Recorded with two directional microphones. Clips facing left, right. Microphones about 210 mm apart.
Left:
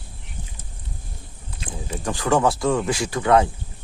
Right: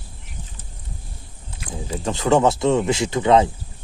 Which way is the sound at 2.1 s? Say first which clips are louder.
Right 3 dB; 20° right (ahead or behind).